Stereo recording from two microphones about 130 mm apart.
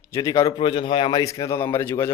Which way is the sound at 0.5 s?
40° left (ahead or behind).